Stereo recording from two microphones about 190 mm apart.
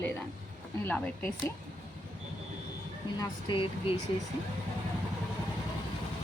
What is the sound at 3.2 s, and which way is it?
Speech, 25° left (ahead or behind).